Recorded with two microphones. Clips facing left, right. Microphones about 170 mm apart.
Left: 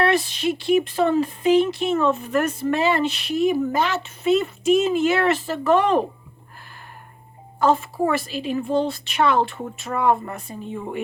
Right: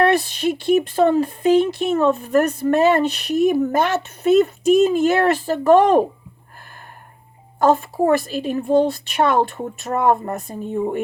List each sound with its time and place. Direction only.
0.0 s speech: 50° right (ahead or behind)
7.6 s speech: 45° right (ahead or behind)